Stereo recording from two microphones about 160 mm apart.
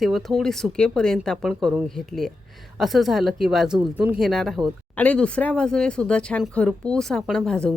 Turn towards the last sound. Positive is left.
turn(degrees=5)  # may be behind; listen again after turning